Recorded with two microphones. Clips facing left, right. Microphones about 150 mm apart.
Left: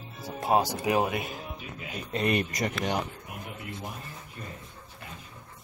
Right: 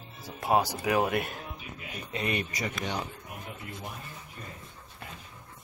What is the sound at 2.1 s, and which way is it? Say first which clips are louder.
Speech: left 5 dB; 45° left (ahead or behind).